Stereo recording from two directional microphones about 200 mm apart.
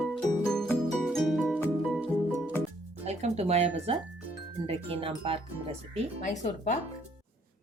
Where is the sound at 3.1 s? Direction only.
35° right (ahead or behind).